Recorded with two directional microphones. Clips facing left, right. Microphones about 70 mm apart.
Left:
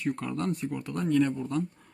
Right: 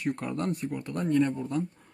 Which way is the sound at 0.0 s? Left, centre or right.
Centre.